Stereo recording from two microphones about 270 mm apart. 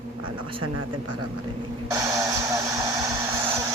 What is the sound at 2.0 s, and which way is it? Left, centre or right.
Radio, centre.